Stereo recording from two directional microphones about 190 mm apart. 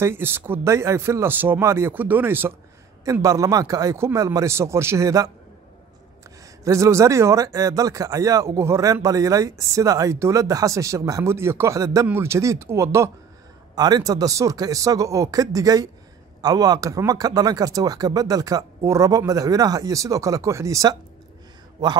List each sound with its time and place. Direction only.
0.0 s speech: 10° right (ahead or behind)
6.6 s speech: 15° right (ahead or behind)